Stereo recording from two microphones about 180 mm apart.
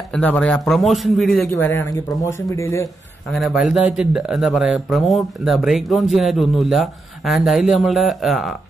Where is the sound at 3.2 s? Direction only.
Centre (ahead or behind).